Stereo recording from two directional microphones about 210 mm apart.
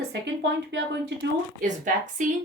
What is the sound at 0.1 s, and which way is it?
Speech, 55° right (ahead or behind).